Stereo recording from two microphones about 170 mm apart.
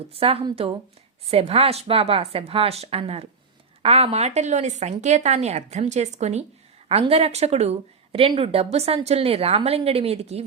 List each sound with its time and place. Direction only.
0.1 s speech: 35° right (ahead or behind)